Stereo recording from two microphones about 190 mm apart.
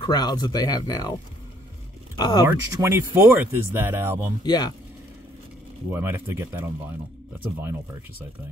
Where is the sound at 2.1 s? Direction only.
25° left (ahead or behind).